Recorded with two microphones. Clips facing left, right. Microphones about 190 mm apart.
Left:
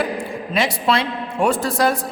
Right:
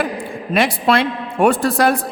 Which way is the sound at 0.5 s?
55° right (ahead or behind).